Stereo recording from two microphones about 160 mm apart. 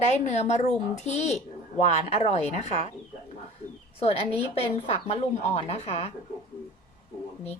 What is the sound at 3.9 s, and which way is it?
A woman's voice, 40° left (ahead or behind).